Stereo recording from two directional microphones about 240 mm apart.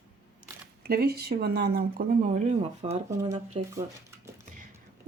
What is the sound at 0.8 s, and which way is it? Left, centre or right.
Speech, right.